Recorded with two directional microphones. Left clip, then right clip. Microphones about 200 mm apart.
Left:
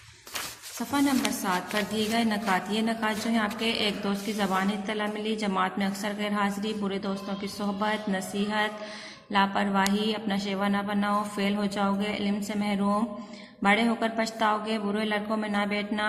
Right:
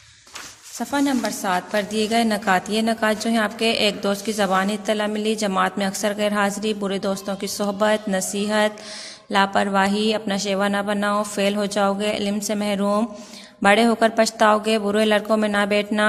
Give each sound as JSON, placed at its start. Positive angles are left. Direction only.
{"t": 0.9, "sound": "a woman's voice", "side_deg": -50}